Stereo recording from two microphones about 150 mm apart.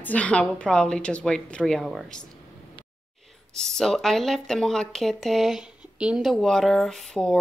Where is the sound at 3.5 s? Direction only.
5° left (ahead or behind).